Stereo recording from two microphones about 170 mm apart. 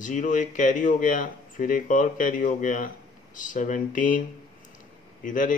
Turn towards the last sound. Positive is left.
turn(degrees=50)  # may be behind; listen again after turning